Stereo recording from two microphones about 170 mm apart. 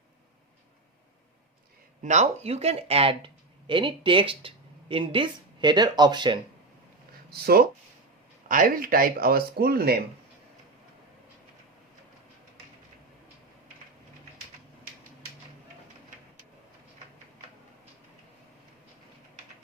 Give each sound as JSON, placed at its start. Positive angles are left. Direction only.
{"t": 2.0, "sound": "speech", "side_deg": -45}
{"t": 7.3, "sound": "speech", "side_deg": -65}